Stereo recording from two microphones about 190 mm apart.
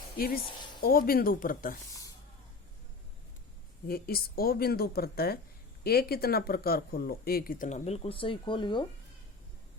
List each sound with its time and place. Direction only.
0.8 s speech: 50° left (ahead or behind)
1.9 s a sound: 15° left (ahead or behind)
3.8 s speech: 55° left (ahead or behind); by 8.8 s 25° left (ahead or behind)